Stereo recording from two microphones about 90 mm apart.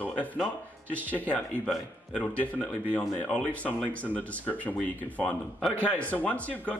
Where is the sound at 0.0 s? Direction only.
15° left (ahead or behind).